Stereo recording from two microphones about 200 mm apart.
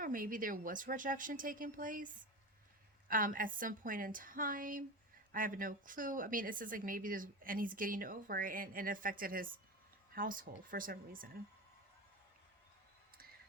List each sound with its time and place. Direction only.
0.0 s a woman's voice: 45° right (ahead or behind)
3.1 s a woman's voice: 45° right (ahead or behind)